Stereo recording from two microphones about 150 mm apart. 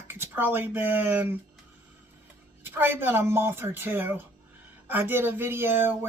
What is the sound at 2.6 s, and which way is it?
Speech, 15° right (ahead or behind).